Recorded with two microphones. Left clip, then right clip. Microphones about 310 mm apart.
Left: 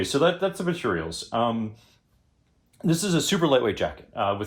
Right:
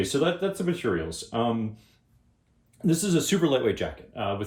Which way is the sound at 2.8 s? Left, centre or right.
Centre.